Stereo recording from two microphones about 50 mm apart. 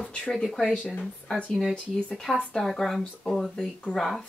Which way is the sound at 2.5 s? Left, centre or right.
Centre.